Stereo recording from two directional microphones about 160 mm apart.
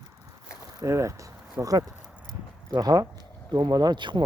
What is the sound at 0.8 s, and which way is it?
Speech, 20° right (ahead or behind).